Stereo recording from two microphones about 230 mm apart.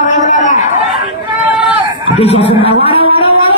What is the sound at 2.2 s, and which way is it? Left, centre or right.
Speech, left.